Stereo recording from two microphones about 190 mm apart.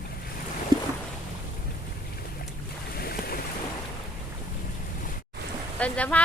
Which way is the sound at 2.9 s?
50° left (ahead or behind).